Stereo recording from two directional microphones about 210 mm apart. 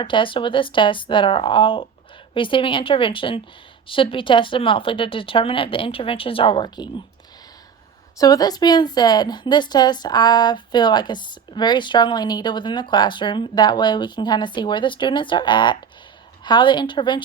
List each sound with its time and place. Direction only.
0.0 s a woman's voice: 25° left (ahead or behind)
8.2 s a woman's voice: 15° left (ahead or behind)